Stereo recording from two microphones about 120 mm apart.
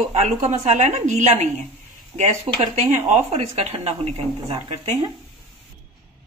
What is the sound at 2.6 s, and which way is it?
Speech, 75° right (ahead or behind).